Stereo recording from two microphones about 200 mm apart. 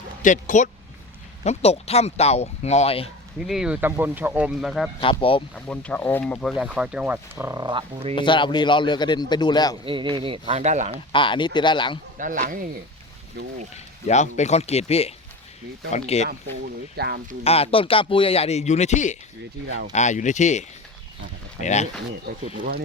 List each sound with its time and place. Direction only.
0.2 s a man's voice: 40° left (ahead or behind)
3.4 s speech: centre (ahead or behind); by 8.1 s 25° right (ahead or behind)
8.1 s a man's voice: 25° left (ahead or behind)
9.8 s speech: 25° right (ahead or behind)
11.1 s a man's voice: 25° left (ahead or behind)
12.1 s speech: 40° right (ahead or behind)
14.1 s a man's voice: 35° left (ahead or behind)
17.0 s speech: 50° right (ahead or behind)
17.4 s a man's voice: 30° left (ahead or behind)
19.6 s speech: 60° right (ahead or behind)
19.9 s a man's voice: 35° left (ahead or behind)
22.4 s speech: 45° right (ahead or behind)